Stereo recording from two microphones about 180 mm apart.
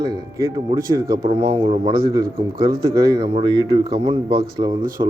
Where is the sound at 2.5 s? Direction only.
55° right (ahead or behind).